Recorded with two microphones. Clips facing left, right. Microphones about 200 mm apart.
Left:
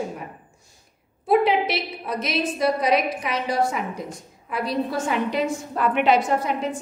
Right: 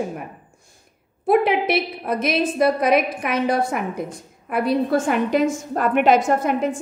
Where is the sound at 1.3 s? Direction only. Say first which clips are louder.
Right 2 dB; 55° right (ahead or behind).